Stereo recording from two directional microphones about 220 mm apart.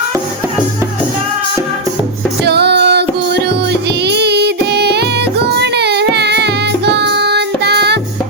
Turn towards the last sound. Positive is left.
turn(degrees=-50)  # may be behind; listen again after turning